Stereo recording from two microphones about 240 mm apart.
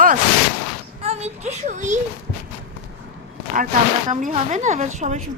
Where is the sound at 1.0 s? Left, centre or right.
Right.